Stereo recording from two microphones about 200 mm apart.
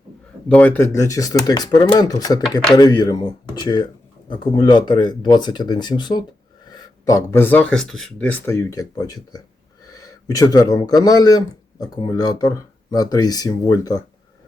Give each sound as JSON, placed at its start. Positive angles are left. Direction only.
{"t": 0.4, "sound": "speech", "side_deg": 5}